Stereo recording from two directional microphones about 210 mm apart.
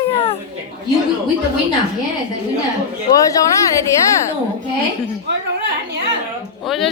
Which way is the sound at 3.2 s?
15° left (ahead or behind).